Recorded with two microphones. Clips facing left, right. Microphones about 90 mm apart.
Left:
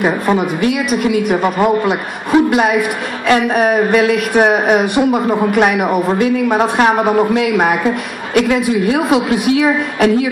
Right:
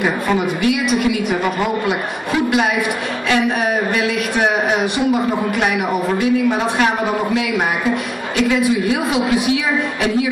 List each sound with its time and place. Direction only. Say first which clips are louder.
0.0 s speech: left 3 dB; 40° left (ahead or behind)